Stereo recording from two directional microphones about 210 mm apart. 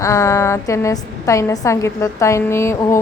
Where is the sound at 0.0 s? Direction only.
15° left (ahead or behind).